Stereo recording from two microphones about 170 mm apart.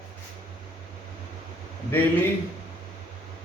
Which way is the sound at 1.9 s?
10° left (ahead or behind).